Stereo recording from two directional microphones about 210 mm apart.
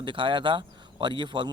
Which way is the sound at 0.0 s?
25° right (ahead or behind).